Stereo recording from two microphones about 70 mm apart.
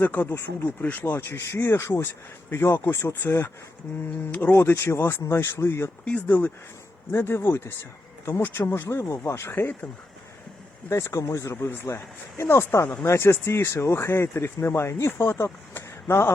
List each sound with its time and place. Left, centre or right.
0.0 s speech: left
4.5 s speech: left
6.2 s speech: left
10.8 s speech: left